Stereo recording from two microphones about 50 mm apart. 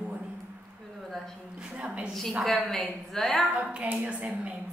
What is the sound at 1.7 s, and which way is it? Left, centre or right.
Speech, right.